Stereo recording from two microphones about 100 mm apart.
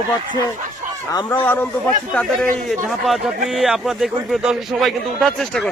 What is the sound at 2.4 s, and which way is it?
Speech, 5° left (ahead or behind).